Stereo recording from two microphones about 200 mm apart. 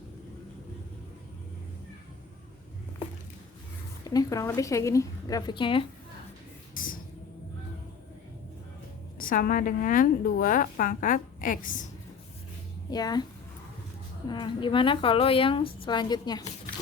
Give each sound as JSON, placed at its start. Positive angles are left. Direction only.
{"t": 4.0, "sound": "a woman's voice", "side_deg": 20}
{"t": 9.1, "sound": "a woman's voice", "side_deg": 45}
{"t": 12.9, "sound": "a woman's voice", "side_deg": 20}
{"t": 14.3, "sound": "a woman's voice", "side_deg": 25}